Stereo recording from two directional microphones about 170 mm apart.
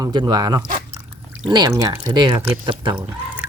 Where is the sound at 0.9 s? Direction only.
10° right (ahead or behind).